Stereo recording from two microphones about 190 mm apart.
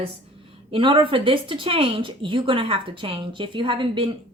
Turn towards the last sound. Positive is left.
turn(degrees=-25)  # may be behind; listen again after turning